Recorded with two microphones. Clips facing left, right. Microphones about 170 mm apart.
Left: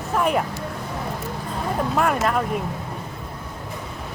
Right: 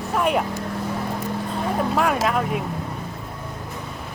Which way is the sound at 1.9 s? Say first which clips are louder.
Left 1 dB; 5° right (ahead or behind).